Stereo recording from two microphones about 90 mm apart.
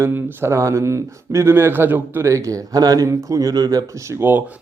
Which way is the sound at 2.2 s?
35° right (ahead or behind).